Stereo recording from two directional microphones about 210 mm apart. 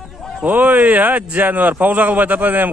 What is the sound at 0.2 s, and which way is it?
A man's voice, centre (ahead or behind).